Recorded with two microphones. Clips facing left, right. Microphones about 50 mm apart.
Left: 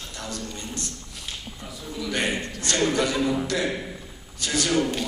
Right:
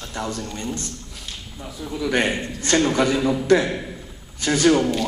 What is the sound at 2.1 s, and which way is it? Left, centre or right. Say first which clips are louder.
A man's voice: right 4 dB; right.